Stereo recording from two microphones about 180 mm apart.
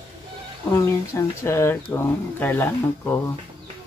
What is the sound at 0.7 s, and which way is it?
Speech, 15° left (ahead or behind).